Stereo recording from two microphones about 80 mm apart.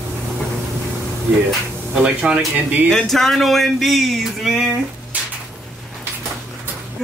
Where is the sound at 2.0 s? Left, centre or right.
Centre.